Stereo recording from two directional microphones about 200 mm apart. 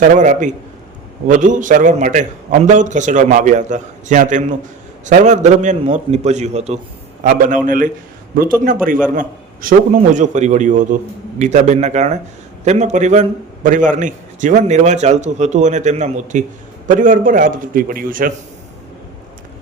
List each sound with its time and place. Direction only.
0.2 s a man's voice: 40° right (ahead or behind)